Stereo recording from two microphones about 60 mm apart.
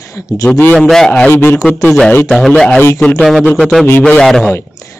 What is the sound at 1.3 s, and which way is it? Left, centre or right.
Speech, left.